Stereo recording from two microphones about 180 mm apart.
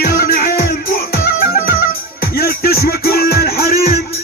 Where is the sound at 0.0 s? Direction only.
55° left (ahead or behind).